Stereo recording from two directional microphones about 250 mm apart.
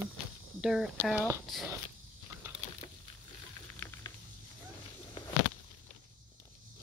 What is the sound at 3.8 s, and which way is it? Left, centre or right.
Patter, centre.